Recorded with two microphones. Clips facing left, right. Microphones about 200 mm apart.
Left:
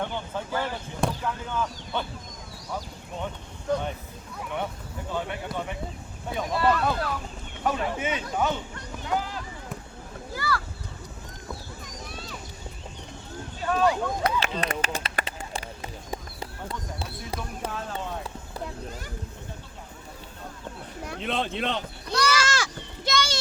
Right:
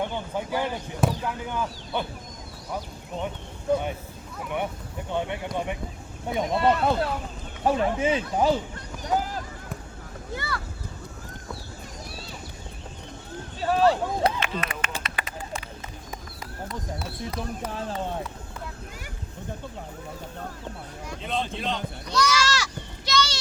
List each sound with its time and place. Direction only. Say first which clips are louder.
0.0 s speech: right 2 dB; 15° right (ahead or behind)
3.7 s speech: right 3 dB; 10° right (ahead or behind)
5.5 s speech: right 3 dB; 5° left (ahead or behind)
6.3 s speech: right 2 dB; 25° right (ahead or behind); by 9.4 s 45° right (ahead or behind)
10.3 s speech: left 3 dB; 25° right (ahead or behind)
13.6 s speech: right 3 dB; 30° right (ahead or behind)
14.3 s a sound: left 3 dB; 35° left (ahead or behind)
16.4 s speech: even; 30° left (ahead or behind)
17.7 s speech: right 3 dB; 30° right (ahead or behind)
21.1 s sheep: left 1 dB; 65° left (ahead or behind)